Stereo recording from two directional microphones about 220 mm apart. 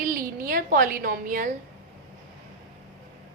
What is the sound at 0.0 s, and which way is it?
A woman's voice, 40° right (ahead or behind).